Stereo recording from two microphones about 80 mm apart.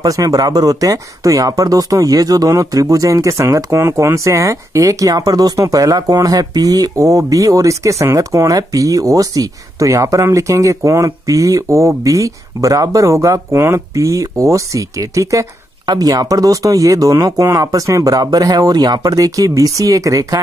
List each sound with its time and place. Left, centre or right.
0.0 s speech: right
15.8 s speech: right